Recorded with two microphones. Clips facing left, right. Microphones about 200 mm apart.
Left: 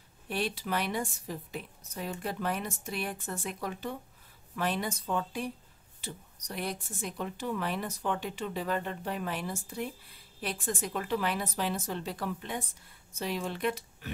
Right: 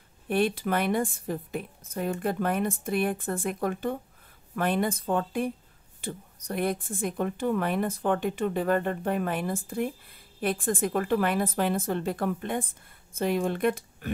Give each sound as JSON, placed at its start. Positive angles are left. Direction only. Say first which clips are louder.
{"t": 0.3, "sound": "a woman's voice", "louder": "right 7 dB", "side_deg": -55}